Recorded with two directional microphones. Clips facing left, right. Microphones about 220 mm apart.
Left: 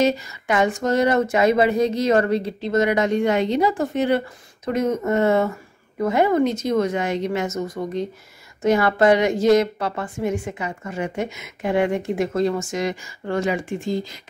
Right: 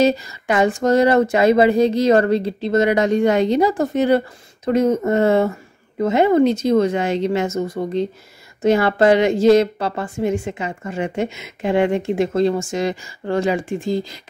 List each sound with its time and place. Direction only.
0.0 s a woman's voice: 35° right (ahead or behind)